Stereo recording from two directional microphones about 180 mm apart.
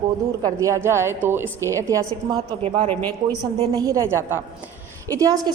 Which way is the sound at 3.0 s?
10° left (ahead or behind).